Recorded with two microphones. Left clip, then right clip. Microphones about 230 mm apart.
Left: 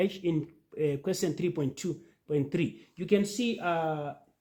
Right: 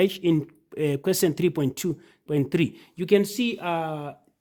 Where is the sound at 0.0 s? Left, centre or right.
Right.